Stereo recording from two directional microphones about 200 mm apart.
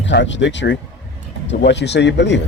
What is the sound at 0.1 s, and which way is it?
A man's voice, 60° left (ahead or behind).